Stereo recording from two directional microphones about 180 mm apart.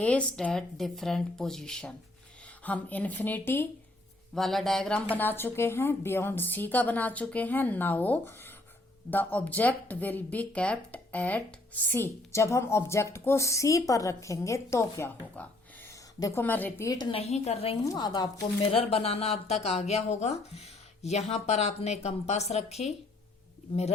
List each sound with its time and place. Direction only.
0.0 s speech: 5° left (ahead or behind)
4.4 s speech: centre (ahead or behind); by 17.1 s 20° left (ahead or behind)
17.1 s speech: 35° left (ahead or behind)
17.8 s speech: 25° left (ahead or behind)